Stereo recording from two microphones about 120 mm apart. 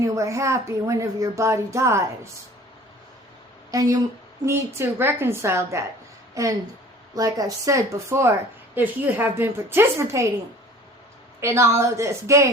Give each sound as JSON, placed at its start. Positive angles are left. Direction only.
{"t": 0.0, "sound": "speech", "side_deg": -25}
{"t": 3.7, "sound": "a woman's voice", "side_deg": -30}
{"t": 11.3, "sound": "speech", "side_deg": -25}